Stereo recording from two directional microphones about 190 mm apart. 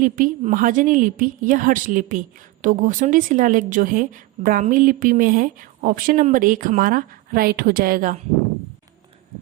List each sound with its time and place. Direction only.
0.0 s a woman's voice: 45° right (ahead or behind)